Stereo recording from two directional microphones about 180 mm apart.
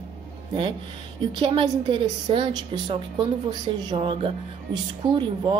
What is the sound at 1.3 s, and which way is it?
A woman's voice, 25° right (ahead or behind).